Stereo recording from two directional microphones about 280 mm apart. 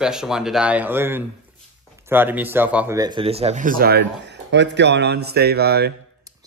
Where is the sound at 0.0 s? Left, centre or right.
Centre; by 5.9 s right.